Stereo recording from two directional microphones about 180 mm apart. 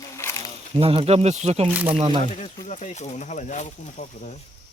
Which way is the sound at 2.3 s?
40° left (ahead or behind).